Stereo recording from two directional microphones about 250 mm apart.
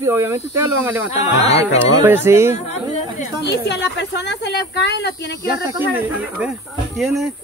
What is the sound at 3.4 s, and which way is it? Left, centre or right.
Speech, left.